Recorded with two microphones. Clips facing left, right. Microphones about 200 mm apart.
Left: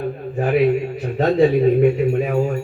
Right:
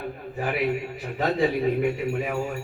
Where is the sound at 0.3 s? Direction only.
45° left (ahead or behind).